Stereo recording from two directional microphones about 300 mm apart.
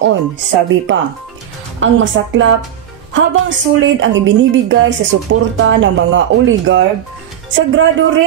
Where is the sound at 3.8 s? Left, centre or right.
Right.